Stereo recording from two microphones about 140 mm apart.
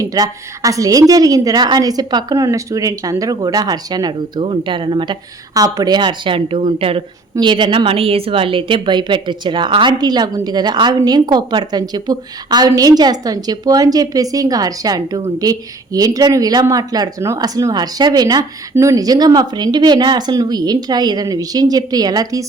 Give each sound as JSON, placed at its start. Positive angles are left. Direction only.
{"t": 0.0, "sound": "a woman's voice", "side_deg": -25}